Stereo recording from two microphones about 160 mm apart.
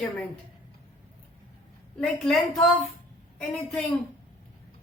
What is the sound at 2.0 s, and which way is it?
Speech, 5° left (ahead or behind).